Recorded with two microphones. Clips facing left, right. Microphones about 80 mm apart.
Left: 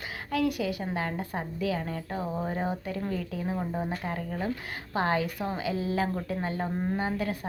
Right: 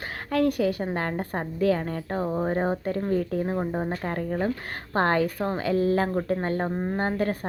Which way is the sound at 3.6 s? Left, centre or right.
Right.